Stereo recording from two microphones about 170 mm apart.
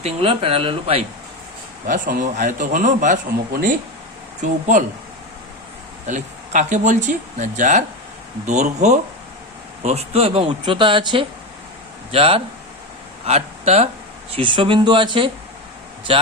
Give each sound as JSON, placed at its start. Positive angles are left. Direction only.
{"t": 0.0, "sound": "speech", "side_deg": -35}
{"t": 1.9, "sound": "a man's voice", "side_deg": -50}
{"t": 6.1, "sound": "a man's voice", "side_deg": -45}